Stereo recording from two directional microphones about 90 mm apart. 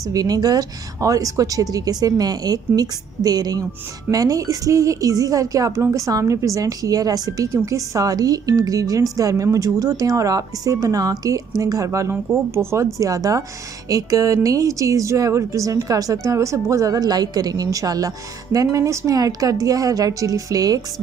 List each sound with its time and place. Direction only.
0.0 s a woman's voice: 45° right (ahead or behind)